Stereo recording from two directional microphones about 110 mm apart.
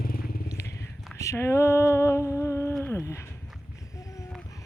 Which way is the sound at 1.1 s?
25° left (ahead or behind).